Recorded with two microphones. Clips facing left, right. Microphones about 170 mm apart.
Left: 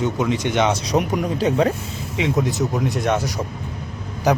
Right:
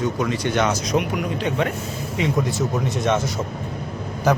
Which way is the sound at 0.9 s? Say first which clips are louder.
Left 2 dB; 40° left (ahead or behind).